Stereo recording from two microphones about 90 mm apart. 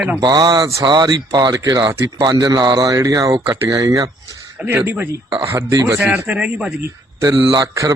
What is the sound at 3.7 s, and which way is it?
Speech, 40° right (ahead or behind).